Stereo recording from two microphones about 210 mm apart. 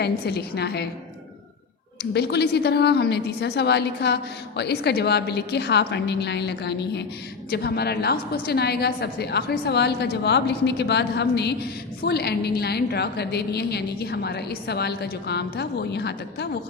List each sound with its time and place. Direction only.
0.0 s a woman's voice: 50° left (ahead or behind)
2.1 s a woman's voice: 50° left (ahead or behind)